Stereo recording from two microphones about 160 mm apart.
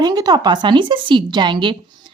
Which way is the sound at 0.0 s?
25° right (ahead or behind).